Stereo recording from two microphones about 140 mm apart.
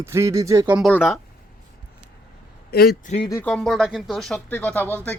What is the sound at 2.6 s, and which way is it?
Speech, 90° left.